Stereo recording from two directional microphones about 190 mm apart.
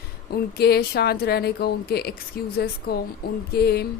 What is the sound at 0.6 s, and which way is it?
Speech, 55° left (ahead or behind).